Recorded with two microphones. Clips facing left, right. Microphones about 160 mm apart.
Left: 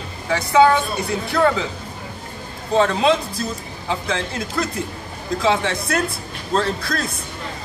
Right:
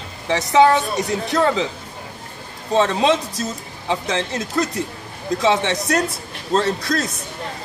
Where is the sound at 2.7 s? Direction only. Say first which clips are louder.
Even; 20° right (ahead or behind).